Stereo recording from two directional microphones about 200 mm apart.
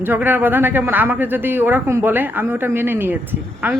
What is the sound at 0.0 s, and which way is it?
Speech, 10° right (ahead or behind).